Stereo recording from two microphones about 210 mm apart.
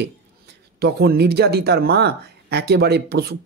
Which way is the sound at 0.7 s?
50° right (ahead or behind).